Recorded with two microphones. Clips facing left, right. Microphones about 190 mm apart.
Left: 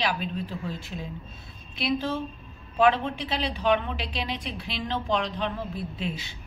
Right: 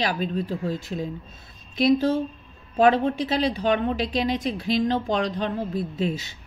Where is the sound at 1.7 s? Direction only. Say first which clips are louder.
Right 8 dB; 45° right (ahead or behind).